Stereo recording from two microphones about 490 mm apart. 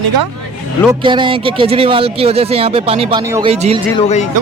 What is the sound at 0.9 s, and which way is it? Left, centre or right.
Speech, centre.